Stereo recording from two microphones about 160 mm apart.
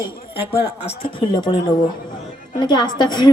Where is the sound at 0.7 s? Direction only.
35° left (ahead or behind).